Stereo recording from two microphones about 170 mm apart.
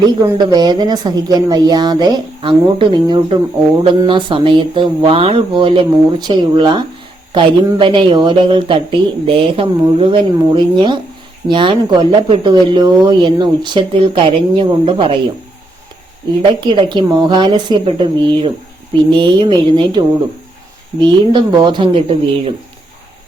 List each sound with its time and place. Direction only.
0.2 s speech: 25° right (ahead or behind)
16.4 s speech: 25° right (ahead or behind)